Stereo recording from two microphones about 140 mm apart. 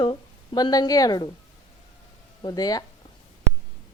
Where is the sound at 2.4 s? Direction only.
25° left (ahead or behind).